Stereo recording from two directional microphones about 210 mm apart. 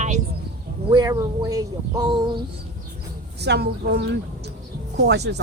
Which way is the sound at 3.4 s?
50° right (ahead or behind).